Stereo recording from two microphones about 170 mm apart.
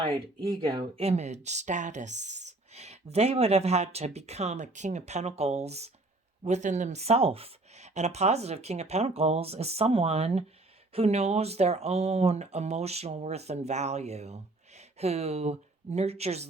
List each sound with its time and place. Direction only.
0.7 s speech: 35° right (ahead or behind)